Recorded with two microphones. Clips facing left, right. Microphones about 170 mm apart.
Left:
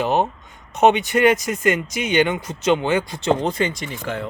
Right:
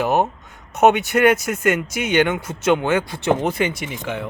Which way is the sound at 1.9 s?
65° right (ahead or behind).